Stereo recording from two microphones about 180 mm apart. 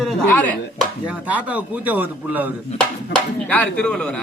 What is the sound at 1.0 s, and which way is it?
A man's voice, 10° right (ahead or behind).